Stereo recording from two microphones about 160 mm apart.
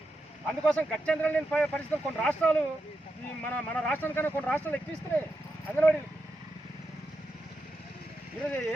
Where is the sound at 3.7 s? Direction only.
10° left (ahead or behind).